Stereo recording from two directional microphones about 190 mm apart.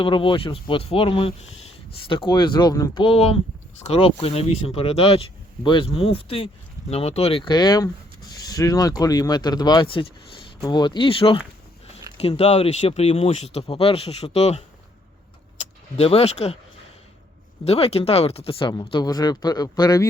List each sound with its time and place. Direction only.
0.0 s speech: 25° left (ahead or behind)
16.0 s speech: 30° left (ahead or behind)
17.7 s speech: 30° left (ahead or behind)